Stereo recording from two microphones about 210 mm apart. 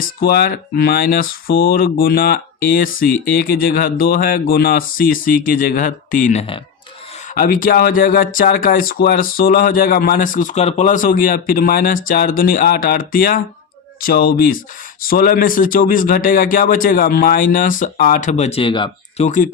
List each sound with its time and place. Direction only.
0.0 s a man's voice: 45° left (ahead or behind)